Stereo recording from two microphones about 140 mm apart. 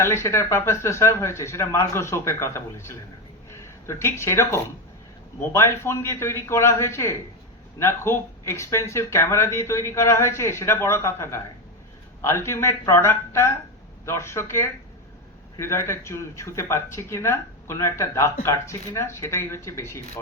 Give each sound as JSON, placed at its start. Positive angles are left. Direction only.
{"t": 0.0, "sound": "speech", "side_deg": 20}